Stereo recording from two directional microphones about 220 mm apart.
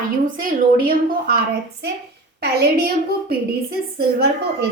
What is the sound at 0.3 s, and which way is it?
A woman's voice, 40° right (ahead or behind).